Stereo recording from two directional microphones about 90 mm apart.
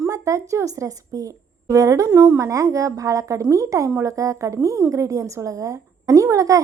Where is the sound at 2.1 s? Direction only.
30° right (ahead or behind).